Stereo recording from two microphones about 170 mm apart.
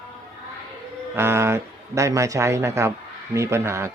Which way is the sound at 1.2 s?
15° right (ahead or behind).